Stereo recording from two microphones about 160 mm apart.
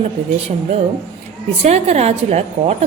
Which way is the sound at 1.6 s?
40° right (ahead or behind).